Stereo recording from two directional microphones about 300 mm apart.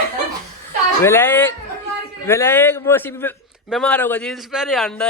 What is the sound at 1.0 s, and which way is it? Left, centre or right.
A man's voice, centre.